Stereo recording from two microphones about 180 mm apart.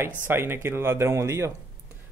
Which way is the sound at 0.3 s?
15° right (ahead or behind).